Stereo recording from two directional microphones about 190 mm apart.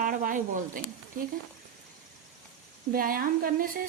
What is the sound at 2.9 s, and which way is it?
Speech, 50° right (ahead or behind).